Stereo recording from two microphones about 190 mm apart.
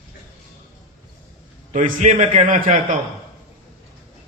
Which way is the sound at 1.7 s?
40° right (ahead or behind).